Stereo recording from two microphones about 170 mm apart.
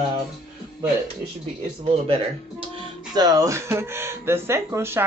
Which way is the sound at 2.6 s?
30° right (ahead or behind).